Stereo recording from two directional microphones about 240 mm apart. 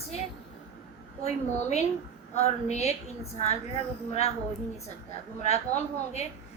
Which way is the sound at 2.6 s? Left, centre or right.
Left.